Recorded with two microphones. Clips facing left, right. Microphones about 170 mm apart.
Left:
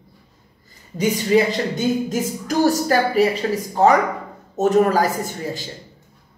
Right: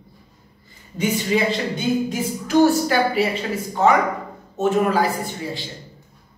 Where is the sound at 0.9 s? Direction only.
40° left (ahead or behind).